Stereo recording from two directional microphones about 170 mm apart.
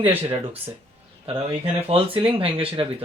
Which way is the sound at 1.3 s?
35° right (ahead or behind).